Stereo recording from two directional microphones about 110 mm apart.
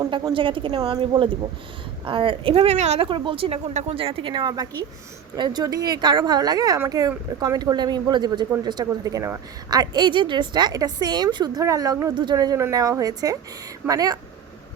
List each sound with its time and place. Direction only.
0.0 s a woman's voice: 35° right (ahead or behind)
0.3 s a woman's voice: 50° right (ahead or behind); by 3.1 s 75° right (ahead or behind)
3.1 s a woman's voice: 50° right (ahead or behind); by 14.2 s 35° right (ahead or behind)